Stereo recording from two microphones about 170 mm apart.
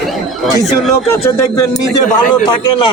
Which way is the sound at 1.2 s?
15° left (ahead or behind).